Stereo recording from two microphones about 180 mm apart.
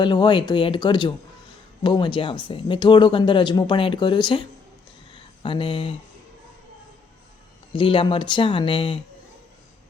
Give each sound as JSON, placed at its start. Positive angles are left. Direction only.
{"t": 0.0, "sound": "speech", "side_deg": 25}
{"t": 5.1, "sound": "a sound", "side_deg": 25}
{"t": 7.7, "sound": "speech", "side_deg": 30}